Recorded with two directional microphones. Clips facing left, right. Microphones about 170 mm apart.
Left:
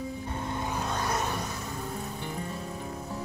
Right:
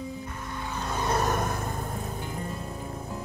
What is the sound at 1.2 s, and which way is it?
Music, 50° right (ahead or behind).